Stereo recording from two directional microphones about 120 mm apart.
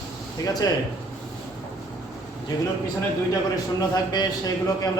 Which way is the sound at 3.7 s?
35° left (ahead or behind).